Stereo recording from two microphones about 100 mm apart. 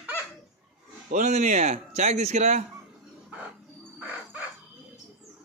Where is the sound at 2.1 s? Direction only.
90° right.